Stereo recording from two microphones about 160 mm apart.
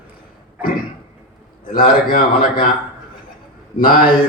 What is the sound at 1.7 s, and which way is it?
Speech, 65° left (ahead or behind).